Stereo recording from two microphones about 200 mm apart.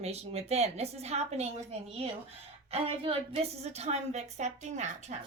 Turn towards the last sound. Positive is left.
turn(degrees=-35)  # may be behind; listen again after turning